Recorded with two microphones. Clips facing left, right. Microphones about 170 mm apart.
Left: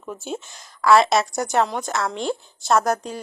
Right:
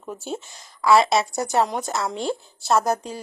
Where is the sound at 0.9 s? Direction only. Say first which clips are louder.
Left 1 dB; centre (ahead or behind).